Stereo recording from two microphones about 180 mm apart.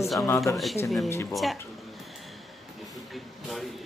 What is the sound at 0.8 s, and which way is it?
Speech, centre (ahead or behind).